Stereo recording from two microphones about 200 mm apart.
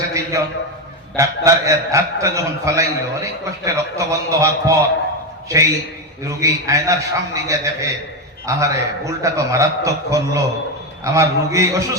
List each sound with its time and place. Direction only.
0.1 s a sound: 15° right (ahead or behind)
1.1 s a man's voice: 15° right (ahead or behind)
6.2 s a man's voice: 15° right (ahead or behind)